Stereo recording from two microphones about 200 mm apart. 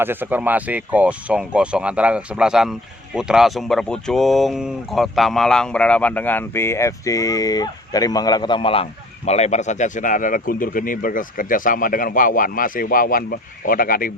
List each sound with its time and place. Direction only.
0.0 s speech: 10° right (ahead or behind); by 14.1 s 45° left (ahead or behind)